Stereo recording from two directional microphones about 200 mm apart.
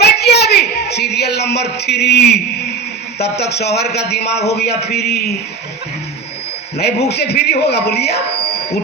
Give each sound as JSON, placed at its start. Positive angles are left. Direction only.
{"t": 0.0, "sound": "a sound", "side_deg": 55}
{"t": 3.2, "sound": "a man's voice", "side_deg": 55}
{"t": 6.7, "sound": "a man's voice", "side_deg": 55}